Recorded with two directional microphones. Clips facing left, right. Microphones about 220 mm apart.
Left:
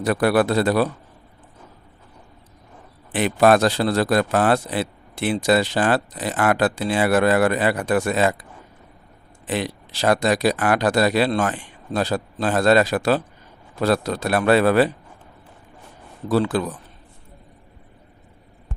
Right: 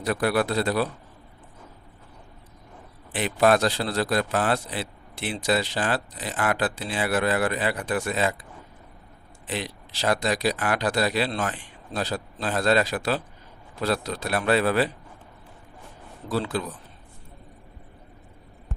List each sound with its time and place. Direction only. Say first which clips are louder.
0.0 s speech: left 5 dB; 65° left (ahead or behind)
3.2 s speech: left 5 dB; 70° left (ahead or behind)
3.7 s speech: left 6 dB; 50° left (ahead or behind); by 8.4 s 70° left (ahead or behind)
9.5 s a man's voice: left 7 dB; 55° left (ahead or behind)
10.6 s a man's voice: left 6 dB; 70° left (ahead or behind)
12.5 s speech: left 6 dB; 75° left (ahead or behind)
13.7 s a man's voice: left 6 dB; 50° left (ahead or behind)
16.3 s speech: left 7 dB; 80° left